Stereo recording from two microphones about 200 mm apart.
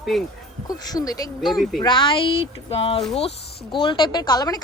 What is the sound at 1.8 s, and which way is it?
A woman's voice, 25° left (ahead or behind).